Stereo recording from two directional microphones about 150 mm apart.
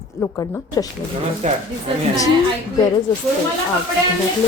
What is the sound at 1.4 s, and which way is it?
Speech, 50° right (ahead or behind).